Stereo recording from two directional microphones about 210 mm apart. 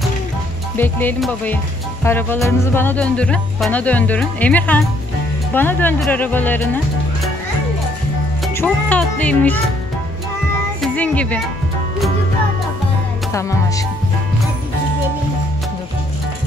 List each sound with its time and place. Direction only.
0.7 s speech: 10° left (ahead or behind)
8.5 s speech: 5° left (ahead or behind)
10.8 s speech: 5° left (ahead or behind)
13.3 s music: 15° left (ahead or behind)